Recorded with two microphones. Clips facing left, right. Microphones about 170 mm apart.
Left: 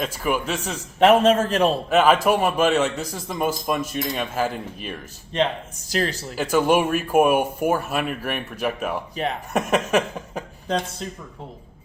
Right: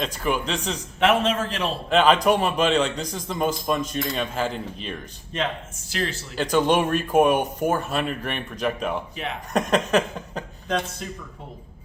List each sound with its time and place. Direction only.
0.0 s a man's voice: 5° left (ahead or behind)
0.9 s a man's voice: 40° left (ahead or behind)
1.9 s a man's voice: 5° left (ahead or behind)
5.9 s speech: 40° left (ahead or behind)
6.3 s a man's voice: 5° left (ahead or behind)